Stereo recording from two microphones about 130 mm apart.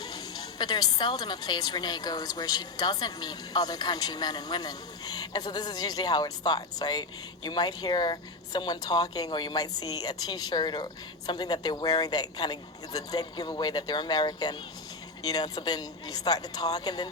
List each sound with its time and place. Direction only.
0.6 s a woman's voice: 30° left (ahead or behind)